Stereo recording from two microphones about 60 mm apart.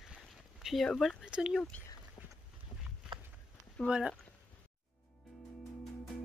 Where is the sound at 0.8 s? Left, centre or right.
Centre.